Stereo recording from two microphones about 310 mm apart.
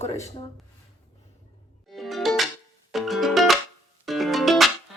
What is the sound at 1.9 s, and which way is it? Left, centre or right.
Music, centre.